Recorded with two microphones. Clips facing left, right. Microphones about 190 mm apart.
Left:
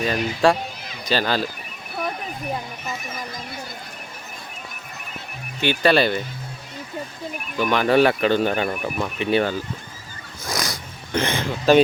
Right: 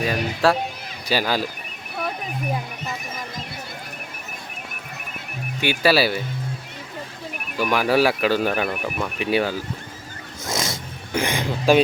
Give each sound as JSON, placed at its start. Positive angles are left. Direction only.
{"t": 0.0, "sound": "speech", "side_deg": -10}
{"t": 5.5, "sound": "speech", "side_deg": -10}
{"t": 7.5, "sound": "speech", "side_deg": -5}
{"t": 10.4, "sound": "music", "side_deg": -25}
{"t": 11.1, "sound": "speech", "side_deg": -10}